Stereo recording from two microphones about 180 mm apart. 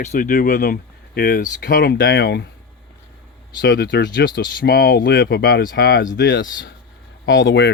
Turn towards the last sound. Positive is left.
turn(degrees=90)